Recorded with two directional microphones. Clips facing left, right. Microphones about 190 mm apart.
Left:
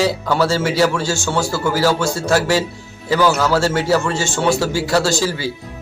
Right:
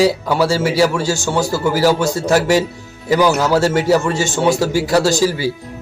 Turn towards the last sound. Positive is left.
turn(degrees=-15)  # may be behind; listen again after turning